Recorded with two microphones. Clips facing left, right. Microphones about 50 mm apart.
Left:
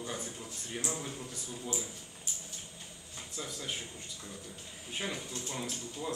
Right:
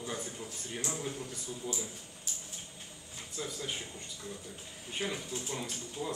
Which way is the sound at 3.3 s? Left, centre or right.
Centre.